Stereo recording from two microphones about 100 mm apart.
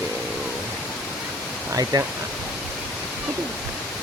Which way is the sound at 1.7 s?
35° right (ahead or behind).